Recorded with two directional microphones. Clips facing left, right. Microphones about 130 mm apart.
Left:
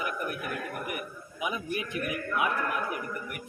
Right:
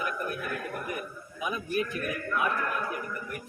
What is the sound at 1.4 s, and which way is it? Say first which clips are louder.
A man's voice: right 2 dB; 15° left (ahead or behind).